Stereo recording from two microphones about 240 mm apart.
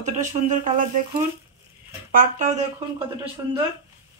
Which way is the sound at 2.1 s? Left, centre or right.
Right.